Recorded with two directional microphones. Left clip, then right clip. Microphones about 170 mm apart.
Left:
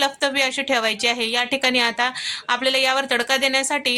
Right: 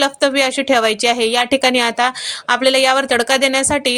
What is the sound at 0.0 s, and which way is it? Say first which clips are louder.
A woman's voice: right 5 dB; 30° right (ahead or behind).